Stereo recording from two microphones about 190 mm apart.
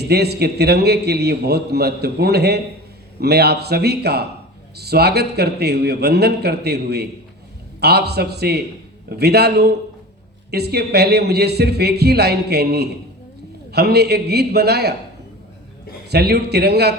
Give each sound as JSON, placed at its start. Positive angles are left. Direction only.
{"t": 0.1, "sound": "a man's voice", "side_deg": -60}
{"t": 16.0, "sound": "a man's voice", "side_deg": -60}